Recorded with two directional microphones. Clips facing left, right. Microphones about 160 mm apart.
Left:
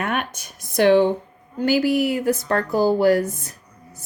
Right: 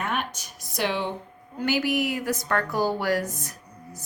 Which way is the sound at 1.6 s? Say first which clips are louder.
Left 6 dB; 30° left (ahead or behind).